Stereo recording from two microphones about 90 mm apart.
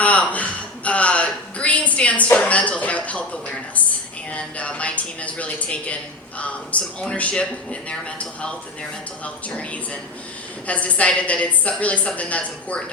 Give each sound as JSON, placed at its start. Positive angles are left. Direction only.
{"t": 0.0, "sound": "speech", "side_deg": 15}
{"t": 4.3, "sound": "speech", "side_deg": 15}